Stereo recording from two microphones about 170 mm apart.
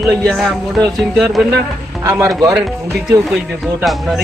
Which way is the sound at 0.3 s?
5° left (ahead or behind).